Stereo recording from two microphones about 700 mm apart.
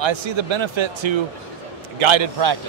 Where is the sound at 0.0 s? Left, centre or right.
Right.